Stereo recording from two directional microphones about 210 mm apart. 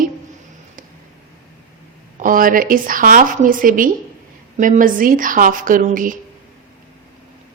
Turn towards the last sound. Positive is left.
turn(degrees=-40)  # may be behind; listen again after turning